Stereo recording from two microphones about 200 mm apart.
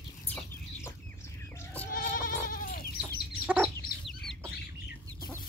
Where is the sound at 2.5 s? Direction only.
45° left (ahead or behind).